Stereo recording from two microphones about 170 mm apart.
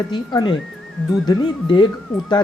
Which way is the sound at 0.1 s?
25° left (ahead or behind).